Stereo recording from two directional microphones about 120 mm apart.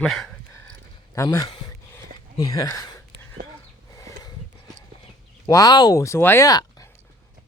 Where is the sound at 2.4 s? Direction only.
30° left (ahead or behind).